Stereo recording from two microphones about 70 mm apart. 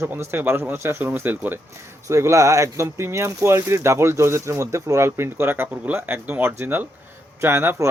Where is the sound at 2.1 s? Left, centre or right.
Right.